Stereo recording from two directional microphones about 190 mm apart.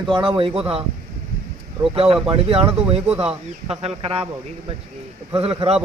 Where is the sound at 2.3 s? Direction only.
30° right (ahead or behind).